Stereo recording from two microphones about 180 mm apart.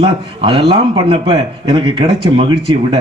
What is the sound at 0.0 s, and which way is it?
A man's voice, 30° right (ahead or behind).